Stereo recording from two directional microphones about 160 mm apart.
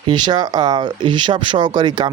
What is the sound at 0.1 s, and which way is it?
Speech, 25° right (ahead or behind).